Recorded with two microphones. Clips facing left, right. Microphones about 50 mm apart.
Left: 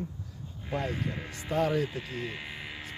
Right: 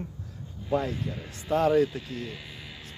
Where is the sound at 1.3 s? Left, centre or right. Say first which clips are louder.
Right 5 dB; centre.